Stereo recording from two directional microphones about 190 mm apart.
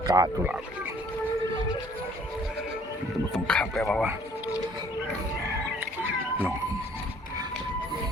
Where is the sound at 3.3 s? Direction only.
5° left (ahead or behind).